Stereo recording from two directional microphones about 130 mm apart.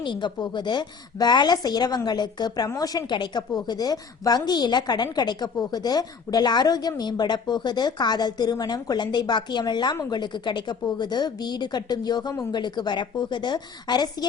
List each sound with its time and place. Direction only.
0.0 s a woman's voice: 35° left (ahead or behind)